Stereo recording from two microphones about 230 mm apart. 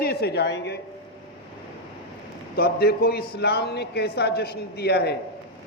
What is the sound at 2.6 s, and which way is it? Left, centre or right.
A man's voice, left.